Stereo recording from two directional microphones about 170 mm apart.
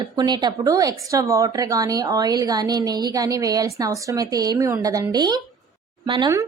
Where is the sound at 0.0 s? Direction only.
25° right (ahead or behind).